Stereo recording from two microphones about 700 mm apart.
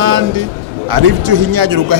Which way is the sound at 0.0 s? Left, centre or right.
Right.